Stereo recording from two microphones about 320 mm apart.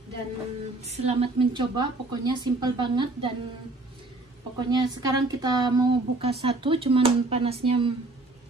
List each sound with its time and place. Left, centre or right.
1.0 s a woman's voice: centre
4.6 s a woman's voice: centre